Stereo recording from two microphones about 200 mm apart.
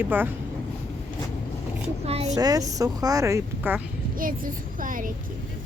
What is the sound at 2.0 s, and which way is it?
Child singing, 30° right (ahead or behind).